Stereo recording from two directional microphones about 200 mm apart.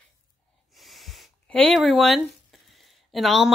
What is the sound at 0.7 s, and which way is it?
Speech, centre (ahead or behind).